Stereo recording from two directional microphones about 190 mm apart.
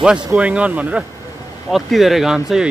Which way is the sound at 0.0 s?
5° right (ahead or behind).